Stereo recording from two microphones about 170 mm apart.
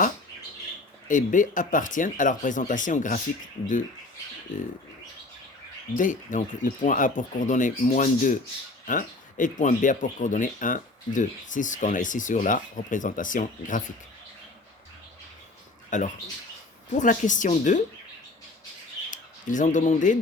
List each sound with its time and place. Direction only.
1.0 s speech: 50° left (ahead or behind)
6.0 s speech: 50° left (ahead or behind)
15.9 s speech: 45° left (ahead or behind)
19.1 s speech: 50° left (ahead or behind)